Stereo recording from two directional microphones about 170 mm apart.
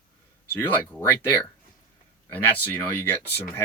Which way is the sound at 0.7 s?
10° left (ahead or behind).